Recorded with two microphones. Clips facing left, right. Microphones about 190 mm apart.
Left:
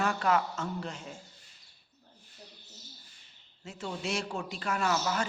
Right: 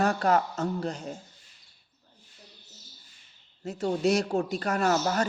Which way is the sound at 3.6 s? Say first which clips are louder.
Right 11 dB; 40° right (ahead or behind).